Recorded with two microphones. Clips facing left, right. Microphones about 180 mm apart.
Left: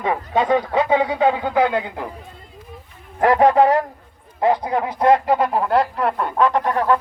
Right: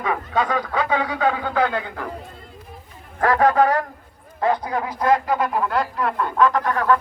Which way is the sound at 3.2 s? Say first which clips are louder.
Left 3 dB; 20° left (ahead or behind).